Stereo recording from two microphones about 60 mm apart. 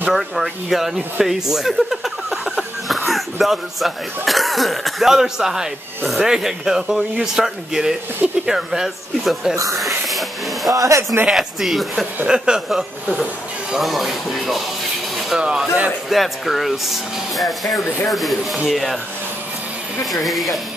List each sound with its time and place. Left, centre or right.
0.1 s speech: centre
1.2 s a sound: centre
3.1 s speech: centre
9.8 s a sound: centre
10.7 s speech: right
11.2 s speech: centre
12.3 s speech: centre
13.7 s speech: centre
16.1 s speech: centre
20.1 s speech: centre